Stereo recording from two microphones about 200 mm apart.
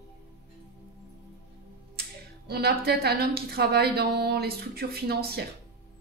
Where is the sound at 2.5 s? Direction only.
50° right (ahead or behind).